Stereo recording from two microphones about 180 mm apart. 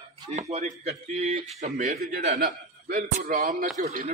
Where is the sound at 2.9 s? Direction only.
50° right (ahead or behind).